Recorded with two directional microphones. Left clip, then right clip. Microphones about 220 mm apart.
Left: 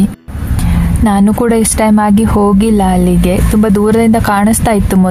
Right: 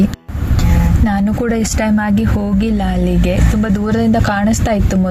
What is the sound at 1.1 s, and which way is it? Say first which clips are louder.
Speech: left 8 dB; 25° left (ahead or behind).